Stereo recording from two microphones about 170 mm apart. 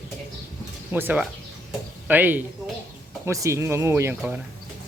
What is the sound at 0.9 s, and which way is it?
Speech, 10° right (ahead or behind).